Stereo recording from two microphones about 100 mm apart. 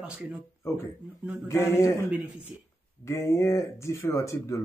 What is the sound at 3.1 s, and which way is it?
Speech, 30° left (ahead or behind).